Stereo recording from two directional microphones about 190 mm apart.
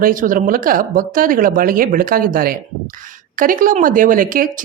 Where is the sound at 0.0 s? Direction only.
45° right (ahead or behind).